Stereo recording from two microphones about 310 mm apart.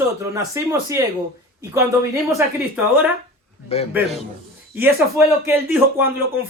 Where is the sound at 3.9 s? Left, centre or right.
Centre.